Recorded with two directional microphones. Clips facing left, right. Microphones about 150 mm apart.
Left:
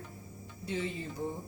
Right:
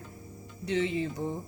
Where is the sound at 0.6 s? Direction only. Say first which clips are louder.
Right 7 dB; 80° right.